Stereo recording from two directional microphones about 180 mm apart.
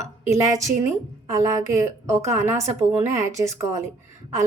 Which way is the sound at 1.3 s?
20° right (ahead or behind).